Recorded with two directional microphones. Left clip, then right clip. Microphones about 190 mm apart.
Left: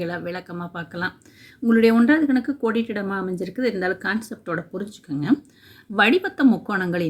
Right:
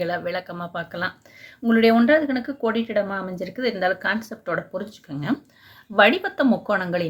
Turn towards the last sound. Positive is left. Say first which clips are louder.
# right 2 dB
turn(degrees=20)  # may be behind; listen again after turning